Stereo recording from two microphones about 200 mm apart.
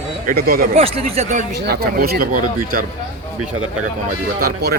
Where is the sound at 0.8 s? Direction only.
30° right (ahead or behind).